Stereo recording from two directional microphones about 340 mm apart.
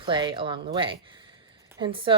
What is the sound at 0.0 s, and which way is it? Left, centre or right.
Speech, centre.